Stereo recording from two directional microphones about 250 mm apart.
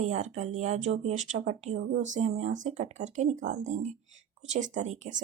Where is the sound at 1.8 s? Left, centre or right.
Right.